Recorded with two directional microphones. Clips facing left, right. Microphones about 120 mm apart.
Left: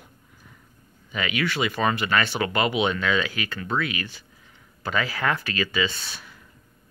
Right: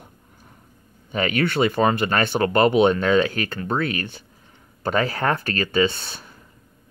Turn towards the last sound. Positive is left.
turn(degrees=-45)  # may be behind; listen again after turning